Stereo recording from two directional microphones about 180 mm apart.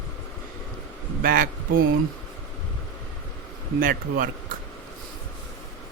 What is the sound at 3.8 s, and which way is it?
Speech, 50° right (ahead or behind).